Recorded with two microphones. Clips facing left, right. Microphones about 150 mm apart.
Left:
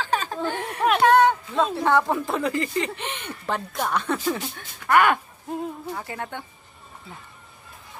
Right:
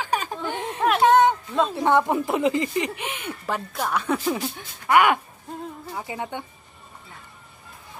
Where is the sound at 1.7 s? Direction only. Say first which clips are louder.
Right 2 dB; 15° right (ahead or behind).